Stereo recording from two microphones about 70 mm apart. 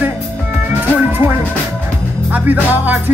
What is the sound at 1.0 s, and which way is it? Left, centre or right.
Music, right.